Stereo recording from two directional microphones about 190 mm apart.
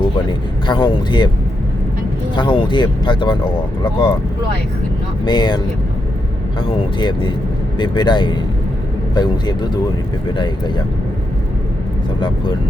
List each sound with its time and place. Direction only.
0.3 s a man's voice: 25° left (ahead or behind)
2.3 s a man's voice: 25° left (ahead or behind)
5.2 s a man's voice: 25° left (ahead or behind)